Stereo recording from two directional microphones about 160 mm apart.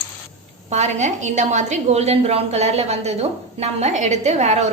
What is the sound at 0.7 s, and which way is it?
A woman's voice, 45° right (ahead or behind).